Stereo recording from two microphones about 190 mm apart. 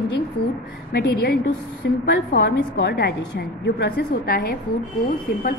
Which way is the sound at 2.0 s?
65° left (ahead or behind).